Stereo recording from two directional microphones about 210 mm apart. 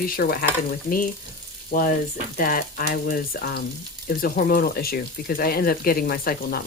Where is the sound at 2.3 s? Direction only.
40° left (ahead or behind).